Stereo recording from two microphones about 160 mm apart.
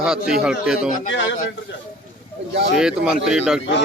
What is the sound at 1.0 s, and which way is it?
Speech, 55° left (ahead or behind).